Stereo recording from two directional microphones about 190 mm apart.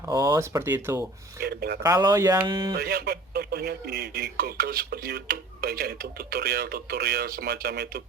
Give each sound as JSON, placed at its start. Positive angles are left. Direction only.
{"t": 0.0, "sound": "speech", "side_deg": -15}
{"t": 1.4, "sound": "speech", "side_deg": -55}
{"t": 1.8, "sound": "speech", "side_deg": -20}
{"t": 2.7, "sound": "speech", "side_deg": -55}